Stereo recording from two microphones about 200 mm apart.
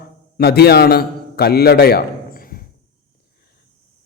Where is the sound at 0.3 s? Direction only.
50° left (ahead or behind).